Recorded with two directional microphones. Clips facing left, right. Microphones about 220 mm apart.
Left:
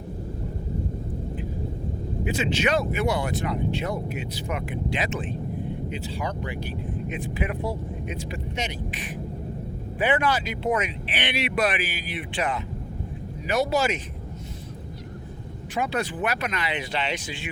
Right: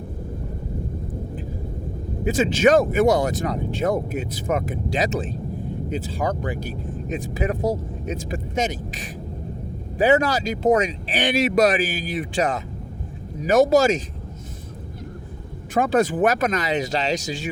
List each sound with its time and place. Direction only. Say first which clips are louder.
2.2 s speech: right 8 dB; 45° right (ahead or behind)
15.7 s speech: right 8 dB; 50° right (ahead or behind)